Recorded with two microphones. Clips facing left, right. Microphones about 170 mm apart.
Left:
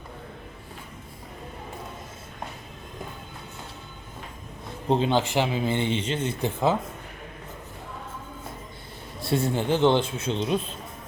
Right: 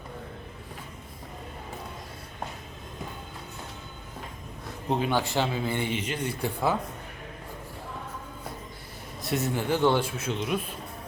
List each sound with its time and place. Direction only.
4.9 s speech: 25° left (ahead or behind)
9.2 s speech: 30° left (ahead or behind)